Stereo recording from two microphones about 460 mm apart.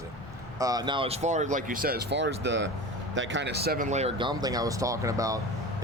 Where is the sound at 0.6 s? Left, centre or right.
Centre.